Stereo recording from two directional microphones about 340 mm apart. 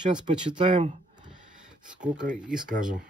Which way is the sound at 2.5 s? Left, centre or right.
Centre.